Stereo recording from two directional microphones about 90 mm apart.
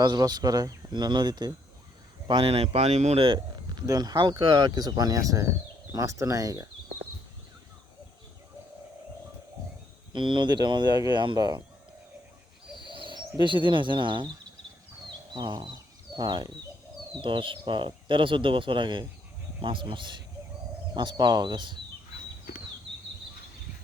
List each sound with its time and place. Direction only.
0.0 s speech: 50° right (ahead or behind)
2.2 s speech: 80° right
3.3 s speech: 50° right (ahead or behind)
10.1 s speech: 60° right (ahead or behind)
12.9 s bird: 65° right (ahead or behind)
13.4 s speech: 65° right (ahead or behind)
17.2 s speech: 65° right (ahead or behind)